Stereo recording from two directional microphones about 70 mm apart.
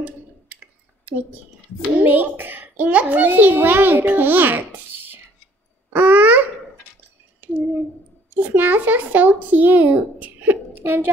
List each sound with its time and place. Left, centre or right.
2.0 s a child's voice: right
5.9 s a sound: right
8.3 s a child's voice: right